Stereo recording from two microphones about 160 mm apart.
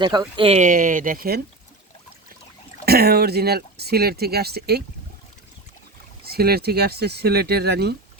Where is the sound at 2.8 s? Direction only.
75° right (ahead or behind).